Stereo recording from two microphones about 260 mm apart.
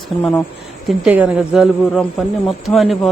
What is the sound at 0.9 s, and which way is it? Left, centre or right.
A man's voice, centre.